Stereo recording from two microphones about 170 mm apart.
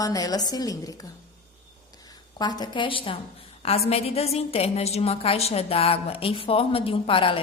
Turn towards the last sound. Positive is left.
turn(degrees=30)  # may be behind; listen again after turning